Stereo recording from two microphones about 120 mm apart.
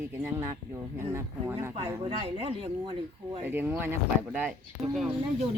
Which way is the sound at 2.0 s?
40° right (ahead or behind).